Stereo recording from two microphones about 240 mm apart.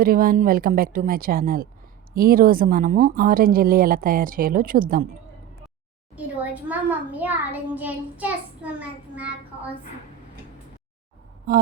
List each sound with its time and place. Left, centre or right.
0.0 s speech: right
6.1 s a child's voice: centre